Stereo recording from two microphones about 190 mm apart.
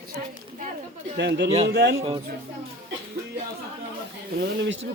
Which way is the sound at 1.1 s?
65° right (ahead or behind).